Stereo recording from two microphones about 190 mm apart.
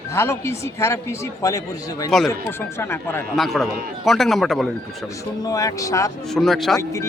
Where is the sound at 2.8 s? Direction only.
15° left (ahead or behind).